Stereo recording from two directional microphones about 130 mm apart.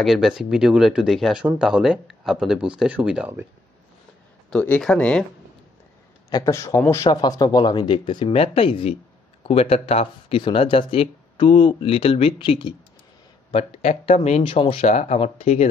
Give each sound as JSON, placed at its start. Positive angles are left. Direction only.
{"t": 0.0, "sound": "speech", "side_deg": -5}
{"t": 4.5, "sound": "speech", "side_deg": 10}
{"t": 6.3, "sound": "a man's voice", "side_deg": 25}
{"t": 7.1, "sound": "speech", "side_deg": 30}
{"t": 13.5, "sound": "speech", "side_deg": 50}
{"t": 14.4, "sound": "speech", "side_deg": 45}
{"t": 14.9, "sound": "speech", "side_deg": 60}